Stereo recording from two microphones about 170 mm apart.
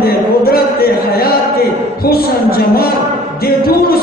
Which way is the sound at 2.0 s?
65° left (ahead or behind).